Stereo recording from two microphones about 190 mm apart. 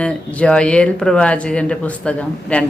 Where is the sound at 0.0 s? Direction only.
5° left (ahead or behind).